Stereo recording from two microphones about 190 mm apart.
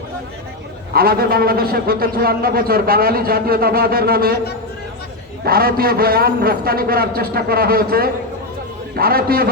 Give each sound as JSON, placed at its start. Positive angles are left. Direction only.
{"t": 0.9, "sound": "a man's voice", "side_deg": -50}
{"t": 5.5, "sound": "a man's voice", "side_deg": -50}